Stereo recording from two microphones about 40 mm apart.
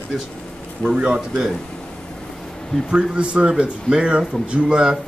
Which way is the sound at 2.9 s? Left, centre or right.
Right.